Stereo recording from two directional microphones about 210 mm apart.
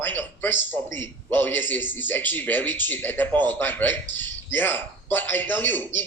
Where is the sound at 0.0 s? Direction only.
10° left (ahead or behind).